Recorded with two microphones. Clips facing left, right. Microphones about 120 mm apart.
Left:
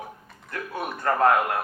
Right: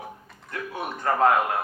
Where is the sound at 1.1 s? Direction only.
25° right (ahead or behind).